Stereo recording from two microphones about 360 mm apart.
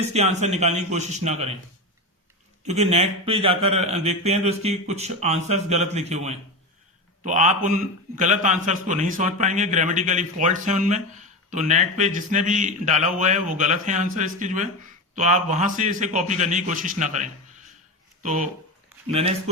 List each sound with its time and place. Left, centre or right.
0.0 s speech: centre
2.6 s speech: centre